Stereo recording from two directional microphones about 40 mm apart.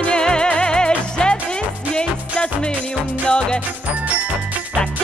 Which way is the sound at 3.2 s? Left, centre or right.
Left.